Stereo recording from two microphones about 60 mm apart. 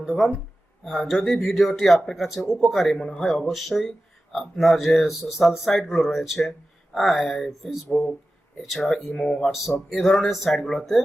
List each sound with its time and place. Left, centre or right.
0.0 s speech: centre
0.9 s speech: centre
2.9 s speech: centre